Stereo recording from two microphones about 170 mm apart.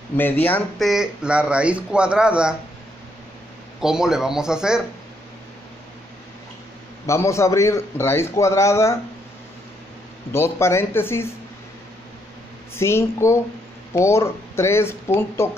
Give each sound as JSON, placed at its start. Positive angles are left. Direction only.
{"t": 0.2, "sound": "a man's voice", "side_deg": 10}
{"t": 0.8, "sound": "speech", "side_deg": -5}
{"t": 3.8, "sound": "speech", "side_deg": -5}
{"t": 7.1, "sound": "a man's voice", "side_deg": 15}
{"t": 10.3, "sound": "a man's voice", "side_deg": 15}
{"t": 12.7, "sound": "a man's voice", "side_deg": 15}